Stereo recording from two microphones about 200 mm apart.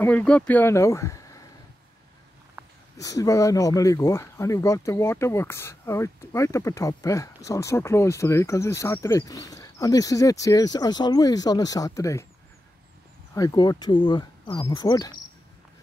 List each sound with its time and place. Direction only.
0.0 s speech: 5° left (ahead or behind)
3.0 s speech: 15° left (ahead or behind)
13.3 s speech: 20° left (ahead or behind)